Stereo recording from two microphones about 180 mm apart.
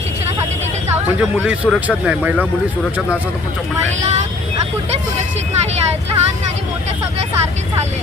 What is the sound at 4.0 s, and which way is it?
Speech, 40° right (ahead or behind).